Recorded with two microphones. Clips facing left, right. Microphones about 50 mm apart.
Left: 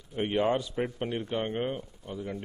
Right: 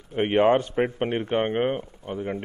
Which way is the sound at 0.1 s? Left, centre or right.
Right.